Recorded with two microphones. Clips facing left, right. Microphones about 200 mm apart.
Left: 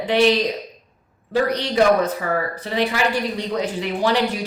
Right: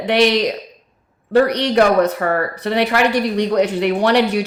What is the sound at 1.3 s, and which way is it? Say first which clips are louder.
Speech: right 5 dB; 70° right (ahead or behind).